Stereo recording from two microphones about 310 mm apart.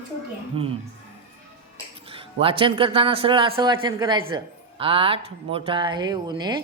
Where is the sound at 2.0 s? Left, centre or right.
Centre.